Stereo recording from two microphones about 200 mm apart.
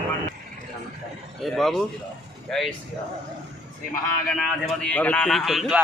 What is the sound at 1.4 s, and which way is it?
Speech, centre (ahead or behind).